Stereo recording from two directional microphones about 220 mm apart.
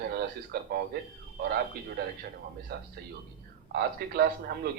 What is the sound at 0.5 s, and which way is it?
Speech, 45° right (ahead or behind).